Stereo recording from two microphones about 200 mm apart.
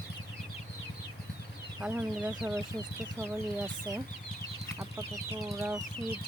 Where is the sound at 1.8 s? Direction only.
10° right (ahead or behind).